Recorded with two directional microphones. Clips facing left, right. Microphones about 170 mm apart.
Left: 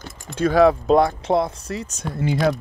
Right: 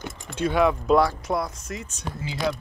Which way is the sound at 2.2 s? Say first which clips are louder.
Left 7 dB; 55° left (ahead or behind).